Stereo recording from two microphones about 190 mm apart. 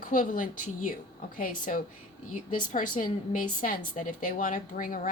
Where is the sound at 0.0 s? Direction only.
45° left (ahead or behind).